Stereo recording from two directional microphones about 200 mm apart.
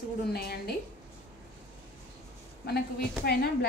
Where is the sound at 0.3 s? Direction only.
50° left (ahead or behind).